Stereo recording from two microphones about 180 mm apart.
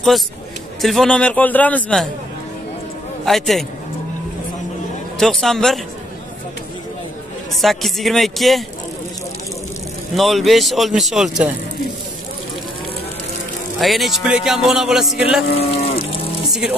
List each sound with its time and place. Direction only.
0.7 s a man's voice: centre (ahead or behind)
3.3 s speech: centre (ahead or behind)
5.2 s speech: centre (ahead or behind)
7.6 s speech: centre (ahead or behind)
10.1 s speech: centre (ahead or behind)
13.7 s speech: centre (ahead or behind)
15.5 s speech: 35° left (ahead or behind)
16.4 s music: centre (ahead or behind)